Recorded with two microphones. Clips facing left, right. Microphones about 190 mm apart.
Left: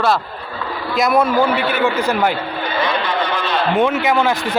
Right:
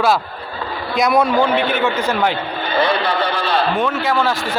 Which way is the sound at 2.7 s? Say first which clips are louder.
Right 3 dB; 30° right (ahead or behind).